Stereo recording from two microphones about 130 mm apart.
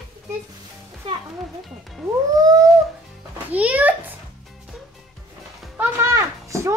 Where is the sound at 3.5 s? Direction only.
10° right (ahead or behind).